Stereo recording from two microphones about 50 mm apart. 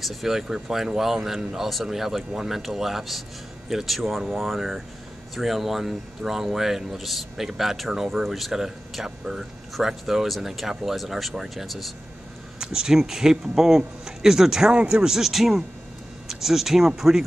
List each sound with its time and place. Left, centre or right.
0.0 s speech: centre
12.5 s speech: centre
14.7 s speech: right
15.0 s speech: centre